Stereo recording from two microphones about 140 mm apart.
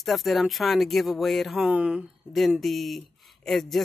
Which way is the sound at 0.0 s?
Centre (ahead or behind).